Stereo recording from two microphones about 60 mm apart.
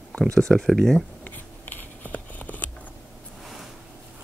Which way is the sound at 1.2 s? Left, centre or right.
Left.